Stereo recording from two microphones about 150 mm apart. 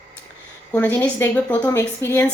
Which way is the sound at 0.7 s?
10° left (ahead or behind).